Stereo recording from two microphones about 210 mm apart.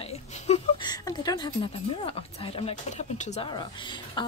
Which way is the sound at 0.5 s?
30° left (ahead or behind).